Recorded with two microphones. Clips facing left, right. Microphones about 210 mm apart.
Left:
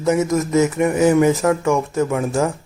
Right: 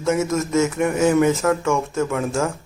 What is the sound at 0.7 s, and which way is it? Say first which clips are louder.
Speech: left 3 dB; centre (ahead or behind).